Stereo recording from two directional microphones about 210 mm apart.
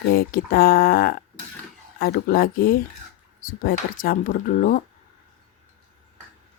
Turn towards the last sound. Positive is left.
turn(degrees=40)  # may be behind; listen again after turning